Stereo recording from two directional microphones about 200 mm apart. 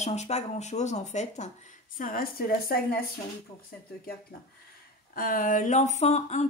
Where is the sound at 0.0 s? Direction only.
35° left (ahead or behind).